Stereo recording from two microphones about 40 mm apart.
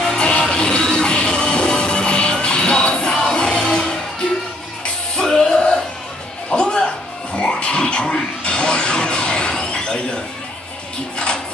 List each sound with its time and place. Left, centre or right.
0.0 s music: centre